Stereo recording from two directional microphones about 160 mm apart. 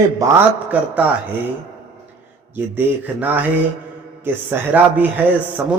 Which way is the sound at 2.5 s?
10° right (ahead or behind).